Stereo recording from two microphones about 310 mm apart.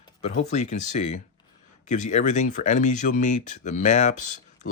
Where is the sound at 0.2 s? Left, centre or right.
Left.